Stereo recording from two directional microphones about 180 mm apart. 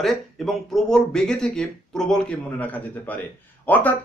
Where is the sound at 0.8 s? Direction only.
5° left (ahead or behind).